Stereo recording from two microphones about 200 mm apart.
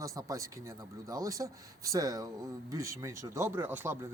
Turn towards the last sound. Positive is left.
turn(degrees=-10)  # may be behind; listen again after turning